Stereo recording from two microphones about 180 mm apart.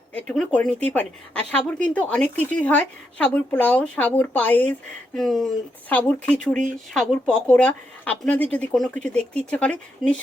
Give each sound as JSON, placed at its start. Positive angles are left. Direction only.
{"t": 0.1, "sound": "a woman's voice", "side_deg": 5}